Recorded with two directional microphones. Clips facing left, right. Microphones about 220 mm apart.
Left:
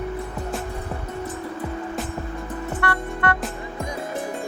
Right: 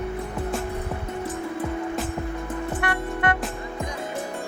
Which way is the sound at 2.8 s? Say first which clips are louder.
Left 1 dB; 15° right (ahead or behind).